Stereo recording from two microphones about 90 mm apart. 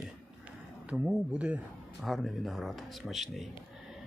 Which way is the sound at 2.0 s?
Centre (ahead or behind).